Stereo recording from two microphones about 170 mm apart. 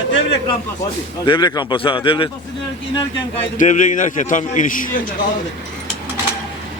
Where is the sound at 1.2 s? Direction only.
25° left (ahead or behind).